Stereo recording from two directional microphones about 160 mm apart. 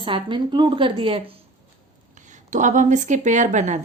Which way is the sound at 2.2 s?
50° right (ahead or behind).